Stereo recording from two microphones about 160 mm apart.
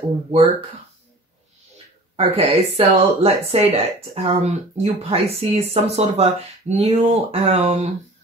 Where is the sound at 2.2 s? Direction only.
40° right (ahead or behind).